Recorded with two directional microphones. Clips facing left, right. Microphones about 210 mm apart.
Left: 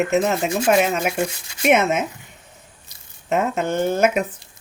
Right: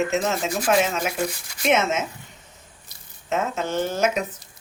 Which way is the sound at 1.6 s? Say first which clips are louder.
Left 4 dB; 60° left (ahead or behind).